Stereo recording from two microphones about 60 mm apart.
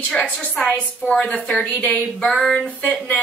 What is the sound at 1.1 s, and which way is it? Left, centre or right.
Speech, centre.